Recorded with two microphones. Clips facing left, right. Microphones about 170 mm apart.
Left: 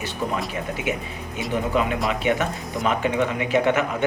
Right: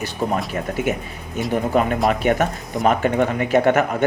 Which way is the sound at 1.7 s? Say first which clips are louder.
Right 6 dB; 50° right (ahead or behind).